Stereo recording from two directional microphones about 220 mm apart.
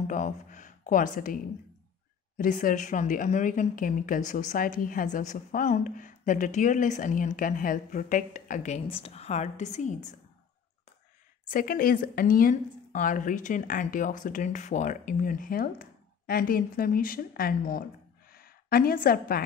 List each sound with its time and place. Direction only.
0.0 s a woman's voice: 35° left (ahead or behind)
11.4 s a woman's voice: 40° left (ahead or behind)